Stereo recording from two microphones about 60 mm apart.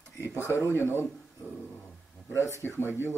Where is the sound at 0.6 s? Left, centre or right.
Left.